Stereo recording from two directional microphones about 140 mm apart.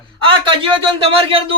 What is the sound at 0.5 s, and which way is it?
A man's voice, 40° right (ahead or behind).